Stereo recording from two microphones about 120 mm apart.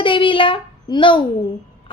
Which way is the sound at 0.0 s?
45° left (ahead or behind).